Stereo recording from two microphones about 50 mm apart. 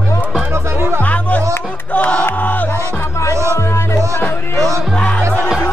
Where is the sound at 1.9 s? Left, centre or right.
Left.